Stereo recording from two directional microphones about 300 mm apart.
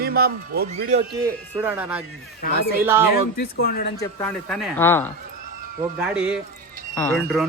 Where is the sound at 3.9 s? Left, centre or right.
Centre.